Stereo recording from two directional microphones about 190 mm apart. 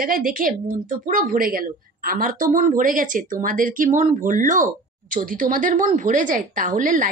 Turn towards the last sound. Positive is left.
turn(degrees=-45)  # may be behind; listen again after turning